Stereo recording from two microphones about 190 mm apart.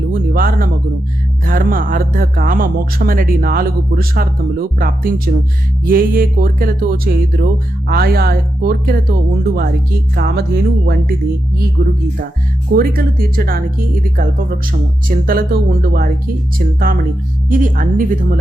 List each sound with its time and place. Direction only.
0.1 s a sound: 50° right (ahead or behind)
1.5 s speech: 45° right (ahead or behind)
10.2 s speech: 55° right (ahead or behind)
11.8 s speech: 45° right (ahead or behind)
14.7 s speech: 50° right (ahead or behind)
17.5 s speech: 45° right (ahead or behind)